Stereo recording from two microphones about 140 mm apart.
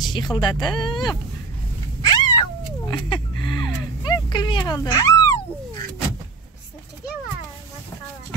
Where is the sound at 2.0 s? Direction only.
30° left (ahead or behind).